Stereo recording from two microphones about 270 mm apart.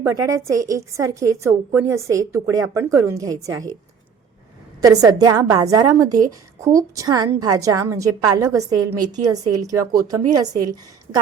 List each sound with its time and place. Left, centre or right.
0.0 s a woman's voice: centre
4.8 s a woman's voice: centre